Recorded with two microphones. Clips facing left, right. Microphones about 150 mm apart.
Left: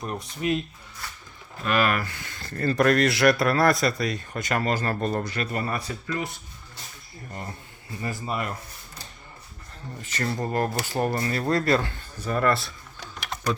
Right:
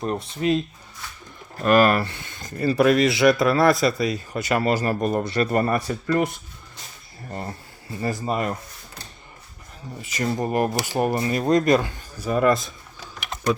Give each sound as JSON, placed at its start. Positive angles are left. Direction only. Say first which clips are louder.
{"t": 0.0, "sound": "speech", "louder": "right 5 dB", "side_deg": -25}
{"t": 1.5, "sound": "speech", "louder": "right 7 dB", "side_deg": -45}
{"t": 5.2, "sound": "speech", "louder": "right 7 dB", "side_deg": -30}
{"t": 5.5, "sound": "speech", "louder": "right 8 dB", "side_deg": -50}
{"t": 8.0, "sound": "speech", "louder": "right 5 dB", "side_deg": -35}
{"t": 10.0, "sound": "speech", "louder": "right 4 dB", "side_deg": -10}